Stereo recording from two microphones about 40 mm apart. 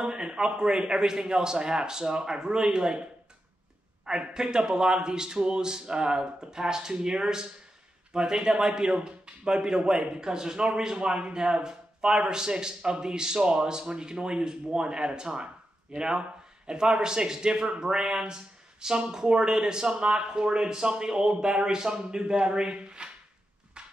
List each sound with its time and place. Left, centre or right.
0.1 s speech: right